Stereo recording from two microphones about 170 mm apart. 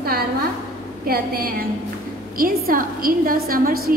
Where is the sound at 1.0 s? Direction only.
60° right (ahead or behind).